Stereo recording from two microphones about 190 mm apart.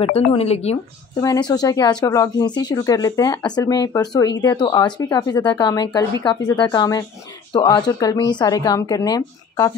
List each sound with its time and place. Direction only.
0.0 s speech: 30° left (ahead or behind)
1.2 s speech: 20° left (ahead or behind)